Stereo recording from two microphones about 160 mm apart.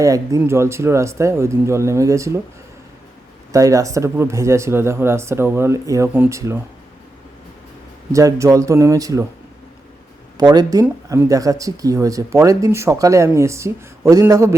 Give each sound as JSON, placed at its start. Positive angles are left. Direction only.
{"t": 0.0, "sound": "speech", "side_deg": -20}
{"t": 3.5, "sound": "speech", "side_deg": -20}
{"t": 8.1, "sound": "speech", "side_deg": -20}
{"t": 10.5, "sound": "speech", "side_deg": -25}